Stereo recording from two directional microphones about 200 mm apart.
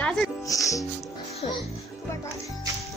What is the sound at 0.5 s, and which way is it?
Speech, 15° left (ahead or behind).